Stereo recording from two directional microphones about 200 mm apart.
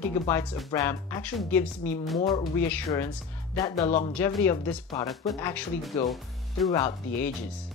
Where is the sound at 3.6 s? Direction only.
20° left (ahead or behind).